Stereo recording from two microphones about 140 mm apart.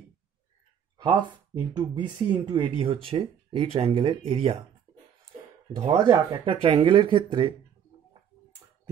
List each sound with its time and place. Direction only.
1.0 s speech: 30° right (ahead or behind)
5.9 s speech: 20° right (ahead or behind)
6.4 s speech: 40° right (ahead or behind)